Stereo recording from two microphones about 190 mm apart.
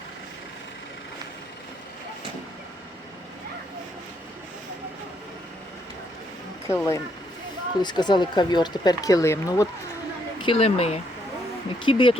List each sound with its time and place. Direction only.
6.7 s speech: 15° left (ahead or behind)
10.4 s speech: 30° left (ahead or behind)